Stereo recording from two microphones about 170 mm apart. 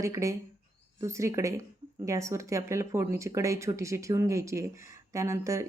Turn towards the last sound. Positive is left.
turn(degrees=-15)  # may be behind; listen again after turning